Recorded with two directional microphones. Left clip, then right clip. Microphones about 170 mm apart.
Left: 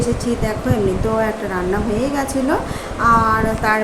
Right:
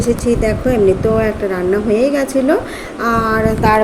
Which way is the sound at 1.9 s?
15° right (ahead or behind).